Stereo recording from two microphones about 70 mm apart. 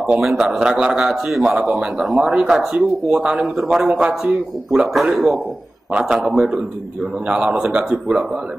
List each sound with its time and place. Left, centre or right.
0.2 s speech: centre
0.5 s speech: centre
7.7 s speech: centre